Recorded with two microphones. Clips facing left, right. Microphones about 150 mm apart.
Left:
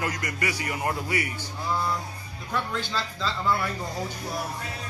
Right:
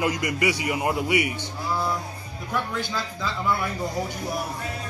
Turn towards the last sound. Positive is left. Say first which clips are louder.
# right 1 dB
turn(degrees=-15)  # may be behind; listen again after turning